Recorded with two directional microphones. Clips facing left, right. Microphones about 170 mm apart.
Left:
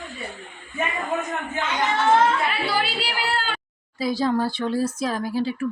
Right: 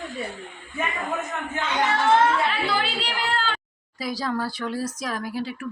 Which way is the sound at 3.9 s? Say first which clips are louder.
Left 5 dB; 25° left (ahead or behind).